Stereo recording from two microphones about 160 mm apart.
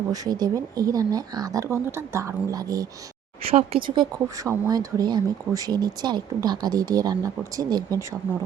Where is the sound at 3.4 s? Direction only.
35° right (ahead or behind).